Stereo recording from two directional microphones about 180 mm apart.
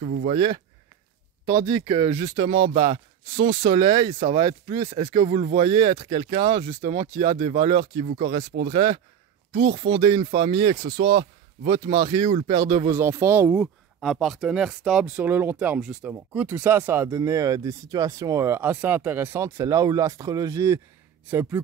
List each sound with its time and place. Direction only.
0.3 s speech: 30° right (ahead or behind)
1.7 s speech: 25° right (ahead or behind)
4.5 s speech: 20° right (ahead or behind)
14.0 s speech: centre (ahead or behind)